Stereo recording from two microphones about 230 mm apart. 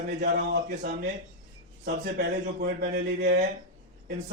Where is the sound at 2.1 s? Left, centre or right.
Right.